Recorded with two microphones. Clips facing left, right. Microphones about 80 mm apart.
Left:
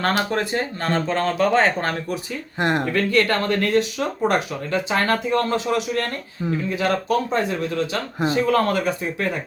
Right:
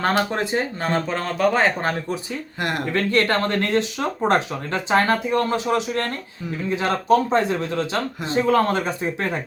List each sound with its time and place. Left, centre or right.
0.3 s speech: centre
2.6 s speech: left
2.9 s speech: right
5.0 s speech: centre